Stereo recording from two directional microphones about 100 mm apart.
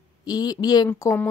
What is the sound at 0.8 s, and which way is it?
Speech, 30° left (ahead or behind).